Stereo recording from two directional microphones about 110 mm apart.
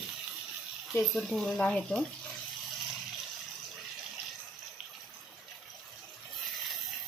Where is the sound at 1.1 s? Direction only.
5° left (ahead or behind).